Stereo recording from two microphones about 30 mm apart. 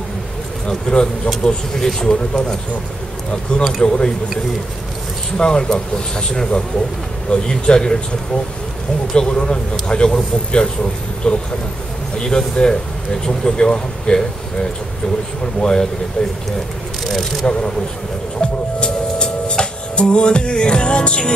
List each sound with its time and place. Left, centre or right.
0.7 s speech: left
5.4 s speech: left
9.1 s speech: left
15.6 s speech: left
17.0 s speech: centre
17.5 s speech: left
18.4 s music: left